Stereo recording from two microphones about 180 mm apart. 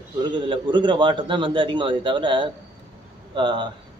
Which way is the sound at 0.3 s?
25° right (ahead or behind).